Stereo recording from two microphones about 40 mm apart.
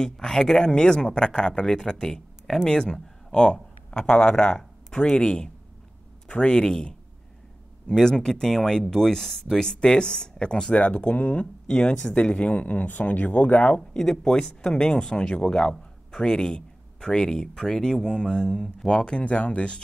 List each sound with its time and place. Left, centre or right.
0.0 s speech: centre
2.4 s speech: centre
2.7 s speech: left
10.7 s speech: left
12.5 s speech: left
13.7 s speech: centre
18.9 s speech: left